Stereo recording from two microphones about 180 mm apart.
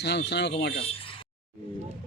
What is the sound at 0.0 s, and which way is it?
Speech, 70° left (ahead or behind).